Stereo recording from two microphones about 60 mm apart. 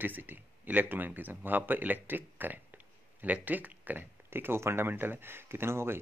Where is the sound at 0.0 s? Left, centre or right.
Right.